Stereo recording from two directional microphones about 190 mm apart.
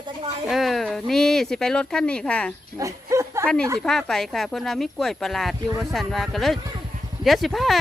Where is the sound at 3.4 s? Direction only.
5° left (ahead or behind).